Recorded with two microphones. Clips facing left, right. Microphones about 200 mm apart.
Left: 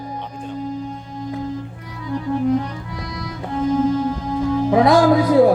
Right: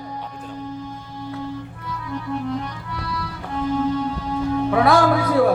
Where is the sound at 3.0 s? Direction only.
20° left (ahead or behind).